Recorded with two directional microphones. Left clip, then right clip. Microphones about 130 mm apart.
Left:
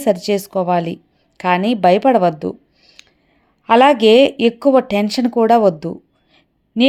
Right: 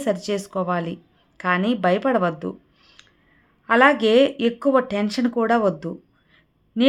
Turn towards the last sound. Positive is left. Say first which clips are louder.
# left 6 dB
turn(degrees=35)  # may be behind; listen again after turning